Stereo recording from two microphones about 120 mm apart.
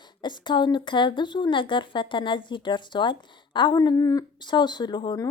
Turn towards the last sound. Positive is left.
turn(degrees=40)  # may be behind; listen again after turning